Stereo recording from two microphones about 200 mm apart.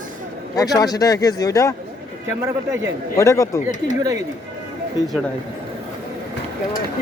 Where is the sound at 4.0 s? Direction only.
15° right (ahead or behind).